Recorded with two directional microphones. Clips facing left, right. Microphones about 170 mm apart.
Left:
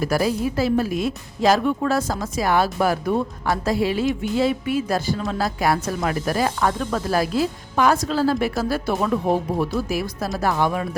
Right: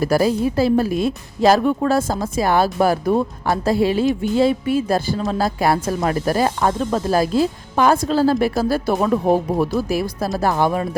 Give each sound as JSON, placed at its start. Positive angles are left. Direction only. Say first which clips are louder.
{"t": 0.0, "sound": "speech", "louder": "right 4 dB", "side_deg": -30}
{"t": 9.9, "sound": "speech", "louder": "right 4 dB", "side_deg": -30}